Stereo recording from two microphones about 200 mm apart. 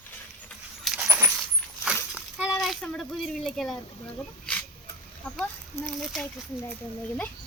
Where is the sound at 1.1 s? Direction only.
10° right (ahead or behind).